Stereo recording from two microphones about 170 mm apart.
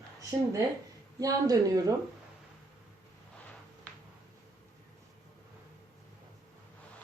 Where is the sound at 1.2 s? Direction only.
20° right (ahead or behind).